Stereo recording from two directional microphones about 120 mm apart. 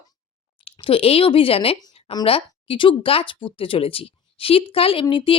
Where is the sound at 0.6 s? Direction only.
50° left (ahead or behind).